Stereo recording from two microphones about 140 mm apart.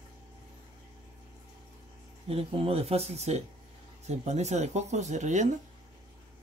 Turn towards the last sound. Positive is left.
turn(degrees=-60)  # may be behind; listen again after turning